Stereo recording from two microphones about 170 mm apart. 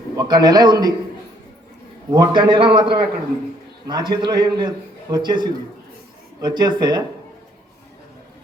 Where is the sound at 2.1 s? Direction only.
25° right (ahead or behind).